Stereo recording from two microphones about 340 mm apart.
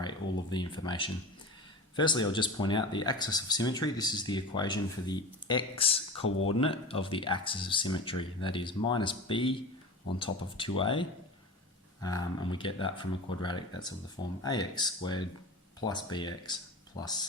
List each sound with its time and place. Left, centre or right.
0.0 s speech: centre
6.2 s speech: left
6.5 s speech: centre
12.0 s speech: centre